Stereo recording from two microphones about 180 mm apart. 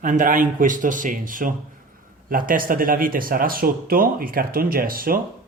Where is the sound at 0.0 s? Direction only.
45° right (ahead or behind).